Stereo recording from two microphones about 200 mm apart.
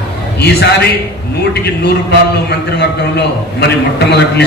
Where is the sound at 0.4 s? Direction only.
55° left (ahead or behind).